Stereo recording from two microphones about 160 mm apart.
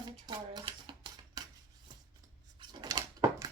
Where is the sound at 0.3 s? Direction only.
30° right (ahead or behind).